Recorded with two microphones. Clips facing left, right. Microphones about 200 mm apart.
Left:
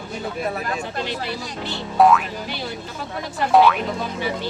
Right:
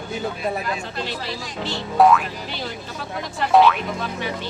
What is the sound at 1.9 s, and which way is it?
Speech, centre (ahead or behind).